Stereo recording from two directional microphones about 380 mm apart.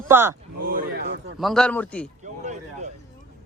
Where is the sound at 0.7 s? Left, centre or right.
Right.